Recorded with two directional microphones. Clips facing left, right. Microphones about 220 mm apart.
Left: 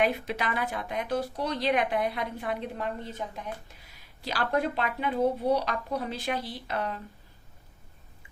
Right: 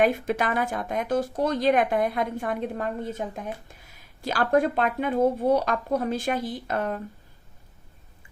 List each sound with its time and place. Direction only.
0.0 s speech: 45° right (ahead or behind)